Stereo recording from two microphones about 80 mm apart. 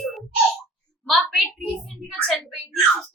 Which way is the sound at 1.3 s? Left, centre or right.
Centre.